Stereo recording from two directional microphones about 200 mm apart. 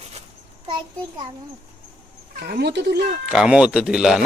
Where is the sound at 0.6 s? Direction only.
25° right (ahead or behind).